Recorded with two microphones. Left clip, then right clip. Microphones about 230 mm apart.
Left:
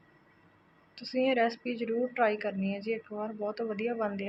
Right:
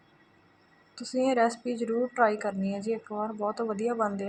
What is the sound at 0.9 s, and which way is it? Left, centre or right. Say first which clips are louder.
A woman's voice: right 2 dB; centre.